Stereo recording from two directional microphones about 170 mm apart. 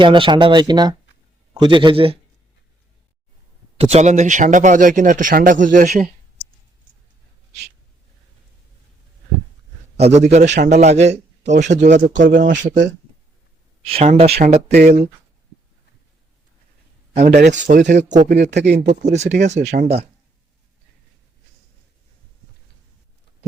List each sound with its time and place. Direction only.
0.0 s speech: 30° right (ahead or behind)
3.8 s speech: 40° right (ahead or behind)
10.0 s speech: 40° right (ahead or behind)
13.8 s speech: 35° right (ahead or behind)
17.5 s speech: 50° right (ahead or behind)
18.5 s speech: 80° right
19.0 s speech: 40° right (ahead or behind)